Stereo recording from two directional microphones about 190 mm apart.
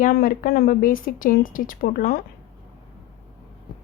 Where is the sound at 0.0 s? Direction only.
50° left (ahead or behind).